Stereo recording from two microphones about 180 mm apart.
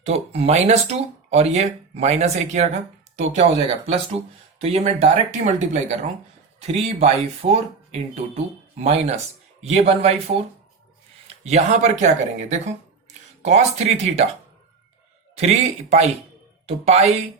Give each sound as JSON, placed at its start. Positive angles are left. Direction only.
{"t": 0.0, "sound": "speech", "side_deg": -35}
{"t": 11.4, "sound": "speech", "side_deg": -40}
{"t": 15.4, "sound": "speech", "side_deg": -40}